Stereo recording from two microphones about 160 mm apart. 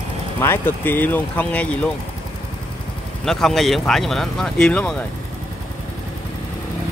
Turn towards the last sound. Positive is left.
turn(degrees=5)  # may be behind; listen again after turning